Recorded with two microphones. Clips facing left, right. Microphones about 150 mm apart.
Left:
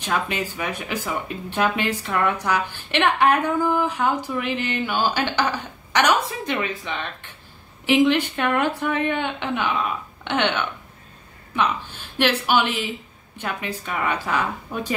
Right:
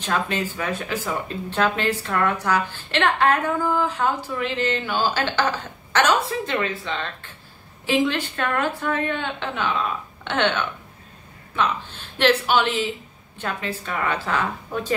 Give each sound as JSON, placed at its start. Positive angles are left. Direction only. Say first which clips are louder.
{"t": 0.0, "sound": "a woman's voice", "louder": "right 1 dB", "side_deg": 10}